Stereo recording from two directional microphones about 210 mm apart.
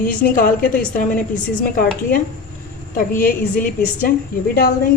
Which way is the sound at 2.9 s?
45° left (ahead or behind).